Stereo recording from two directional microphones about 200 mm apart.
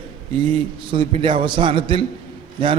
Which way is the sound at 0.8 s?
25° right (ahead or behind).